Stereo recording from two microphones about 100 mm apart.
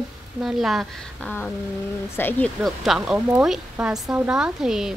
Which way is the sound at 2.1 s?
20° left (ahead or behind).